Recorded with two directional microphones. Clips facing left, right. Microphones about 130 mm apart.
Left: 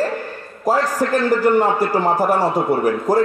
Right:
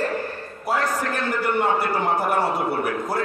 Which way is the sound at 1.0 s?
35° left (ahead or behind).